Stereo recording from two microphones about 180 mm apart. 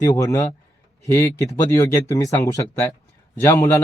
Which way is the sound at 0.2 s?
15° left (ahead or behind).